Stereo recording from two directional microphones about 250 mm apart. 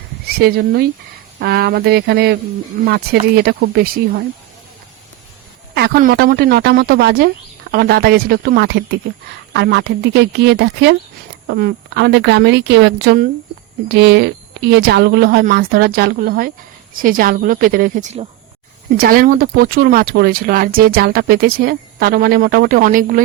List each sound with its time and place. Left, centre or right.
0.3 s speech: right
5.7 s a woman's voice: right